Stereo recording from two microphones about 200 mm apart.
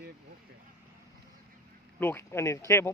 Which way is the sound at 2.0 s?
10° left (ahead or behind).